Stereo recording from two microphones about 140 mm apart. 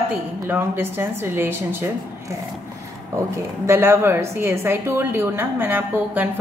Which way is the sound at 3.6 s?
15° right (ahead or behind).